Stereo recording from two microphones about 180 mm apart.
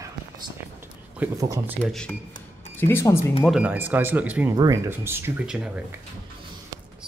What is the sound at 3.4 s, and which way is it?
Speech, 5° right (ahead or behind).